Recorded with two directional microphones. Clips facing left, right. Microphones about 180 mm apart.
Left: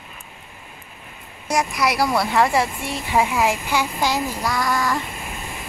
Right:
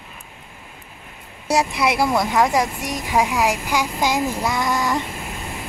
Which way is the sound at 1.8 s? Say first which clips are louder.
Right 1 dB; 25° right (ahead or behind).